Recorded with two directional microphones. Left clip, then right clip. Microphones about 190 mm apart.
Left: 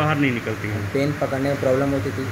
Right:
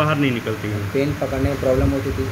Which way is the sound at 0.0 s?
10° right (ahead or behind).